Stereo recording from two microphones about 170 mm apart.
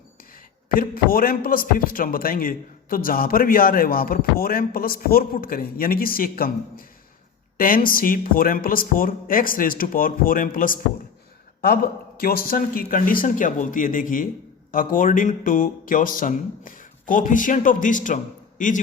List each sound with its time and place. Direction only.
0.7 s speech: 55° left (ahead or behind)